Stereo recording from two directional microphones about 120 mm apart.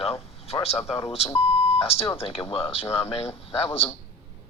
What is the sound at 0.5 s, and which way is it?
Speech, 35° left (ahead or behind).